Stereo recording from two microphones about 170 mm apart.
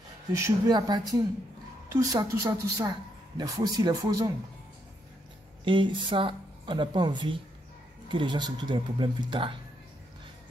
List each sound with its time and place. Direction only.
0.3 s a woman's voice: 20° right (ahead or behind)
5.7 s a woman's voice: 30° right (ahead or behind)